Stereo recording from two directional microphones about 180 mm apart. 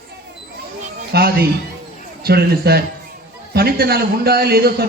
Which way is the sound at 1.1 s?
60° right (ahead or behind).